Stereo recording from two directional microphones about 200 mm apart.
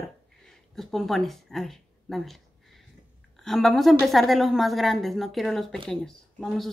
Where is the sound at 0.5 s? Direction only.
Centre (ahead or behind).